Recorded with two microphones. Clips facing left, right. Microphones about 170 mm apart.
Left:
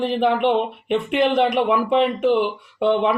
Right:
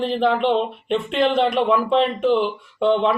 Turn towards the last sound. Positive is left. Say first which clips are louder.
# even
turn(degrees=15)  # may be behind; listen again after turning